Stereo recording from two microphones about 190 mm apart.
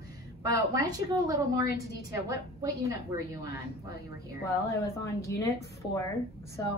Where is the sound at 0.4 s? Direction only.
20° right (ahead or behind).